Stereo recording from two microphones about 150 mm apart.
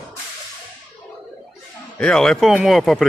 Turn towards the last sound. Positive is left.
turn(degrees=0)  # may be behind; listen again after turning